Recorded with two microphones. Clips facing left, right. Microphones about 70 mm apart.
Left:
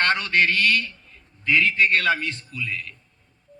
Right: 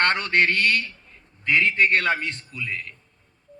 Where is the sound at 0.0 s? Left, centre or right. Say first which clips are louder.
Even; right.